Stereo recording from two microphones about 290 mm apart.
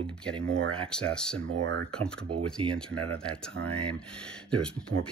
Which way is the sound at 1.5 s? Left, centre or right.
Right.